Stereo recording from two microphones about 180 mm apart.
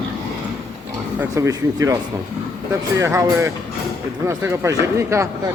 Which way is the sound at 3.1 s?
15° right (ahead or behind).